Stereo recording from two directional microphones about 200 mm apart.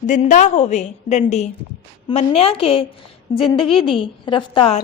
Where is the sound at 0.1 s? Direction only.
40° left (ahead or behind).